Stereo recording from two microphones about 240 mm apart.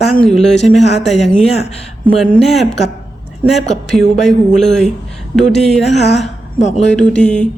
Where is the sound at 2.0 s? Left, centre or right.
Centre.